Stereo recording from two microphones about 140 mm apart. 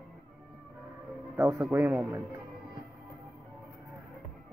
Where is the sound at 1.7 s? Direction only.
15° right (ahead or behind).